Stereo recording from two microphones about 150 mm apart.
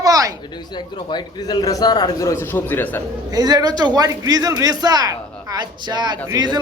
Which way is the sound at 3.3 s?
25° right (ahead or behind).